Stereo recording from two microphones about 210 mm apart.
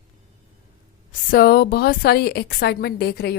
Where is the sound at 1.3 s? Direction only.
45° left (ahead or behind).